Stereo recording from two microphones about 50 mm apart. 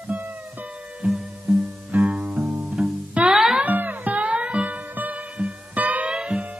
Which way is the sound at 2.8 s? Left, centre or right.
Right.